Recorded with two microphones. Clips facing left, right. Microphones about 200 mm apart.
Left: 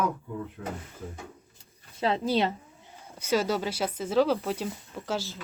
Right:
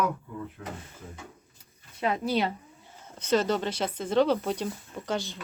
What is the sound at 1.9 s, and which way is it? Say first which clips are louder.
Speech: left 1 dB; 30° left (ahead or behind).